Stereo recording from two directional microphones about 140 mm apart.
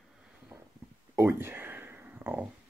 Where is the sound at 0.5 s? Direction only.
15° right (ahead or behind).